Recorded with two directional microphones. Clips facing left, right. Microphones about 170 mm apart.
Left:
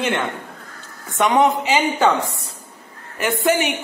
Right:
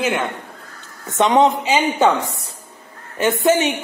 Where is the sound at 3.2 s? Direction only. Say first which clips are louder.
Right 3 dB; 20° right (ahead or behind).